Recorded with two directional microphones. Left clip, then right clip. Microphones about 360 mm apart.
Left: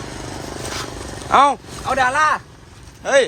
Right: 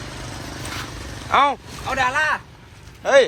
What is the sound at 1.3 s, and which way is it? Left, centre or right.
Speech, centre.